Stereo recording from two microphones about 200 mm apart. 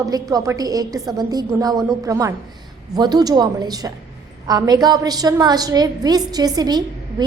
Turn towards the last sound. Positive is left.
turn(degrees=-20)  # may be behind; listen again after turning